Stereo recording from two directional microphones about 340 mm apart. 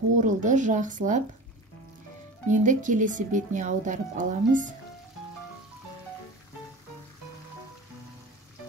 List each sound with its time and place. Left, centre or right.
0.1 s speech: right
2.4 s speech: right